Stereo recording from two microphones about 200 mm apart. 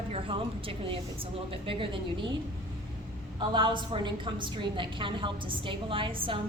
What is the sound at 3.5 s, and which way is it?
A woman's voice, 25° right (ahead or behind).